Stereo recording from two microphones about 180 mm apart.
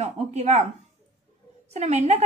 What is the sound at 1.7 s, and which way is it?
Speech, 35° right (ahead or behind).